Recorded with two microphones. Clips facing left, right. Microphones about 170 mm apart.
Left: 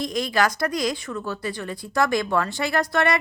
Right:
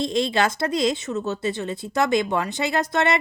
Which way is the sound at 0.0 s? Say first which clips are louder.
Right 1 dB; 25° right (ahead or behind).